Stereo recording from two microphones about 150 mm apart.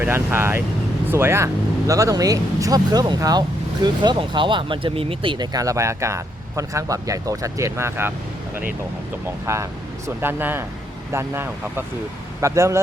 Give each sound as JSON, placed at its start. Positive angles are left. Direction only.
{"t": 0.0, "sound": "speech", "side_deg": -15}
{"t": 9.5, "sound": "speech", "side_deg": -20}